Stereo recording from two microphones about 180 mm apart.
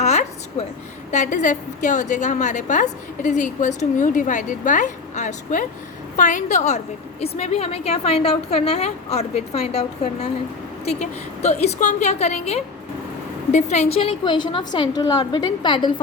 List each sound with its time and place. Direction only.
0.0 s a sound: 40° left (ahead or behind)
1.1 s a woman's voice: 45° left (ahead or behind)
11.4 s a woman's voice: 35° left (ahead or behind)